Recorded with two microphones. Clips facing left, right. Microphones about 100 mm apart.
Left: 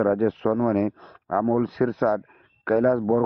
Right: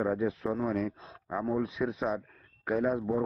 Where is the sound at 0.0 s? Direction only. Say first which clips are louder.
Left 9 dB; 70° left (ahead or behind).